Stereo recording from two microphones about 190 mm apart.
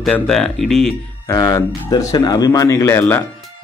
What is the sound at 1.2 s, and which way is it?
A man's voice, 20° left (ahead or behind).